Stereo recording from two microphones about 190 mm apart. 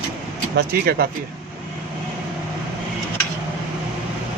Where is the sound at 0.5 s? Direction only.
55° right (ahead or behind).